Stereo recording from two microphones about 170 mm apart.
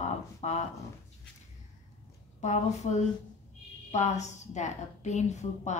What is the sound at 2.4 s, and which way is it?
A woman's voice, 45° left (ahead or behind).